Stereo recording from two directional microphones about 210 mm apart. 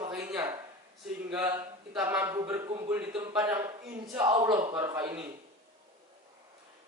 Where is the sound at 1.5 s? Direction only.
20° right (ahead or behind).